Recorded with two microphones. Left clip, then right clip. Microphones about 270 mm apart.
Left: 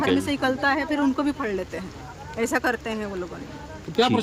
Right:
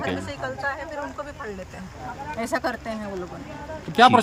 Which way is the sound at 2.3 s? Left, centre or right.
Centre.